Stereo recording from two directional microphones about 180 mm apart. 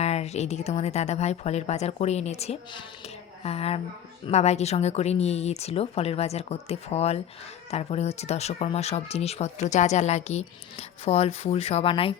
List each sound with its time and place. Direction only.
0.0 s speech: 35° left (ahead or behind)